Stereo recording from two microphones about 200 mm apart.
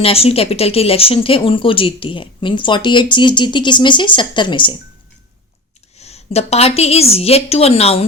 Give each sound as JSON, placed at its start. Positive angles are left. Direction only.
{"t": 0.0, "sound": "speech", "side_deg": 30}
{"t": 6.0, "sound": "a woman's voice", "side_deg": 30}